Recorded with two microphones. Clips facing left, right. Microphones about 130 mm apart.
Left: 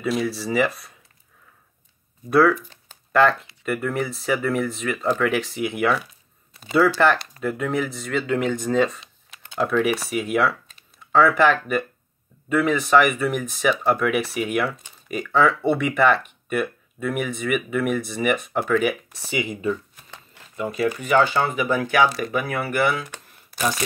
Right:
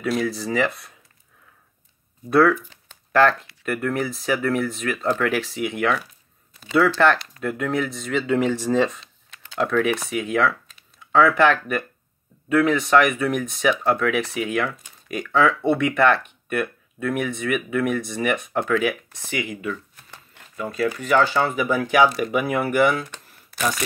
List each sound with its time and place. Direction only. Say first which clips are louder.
0.0 s speech: even; centre (ahead or behind)
2.2 s speech: even; centre (ahead or behind)
19.3 s speech: left 2 dB; 20° left (ahead or behind)
19.7 s a sound: left 5 dB; 20° left (ahead or behind)
20.6 s speech: left 1 dB; 20° left (ahead or behind)
21.6 s speech: right 3 dB; 15° right (ahead or behind)
22.9 s a sound: right 1 dB; 10° left (ahead or behind)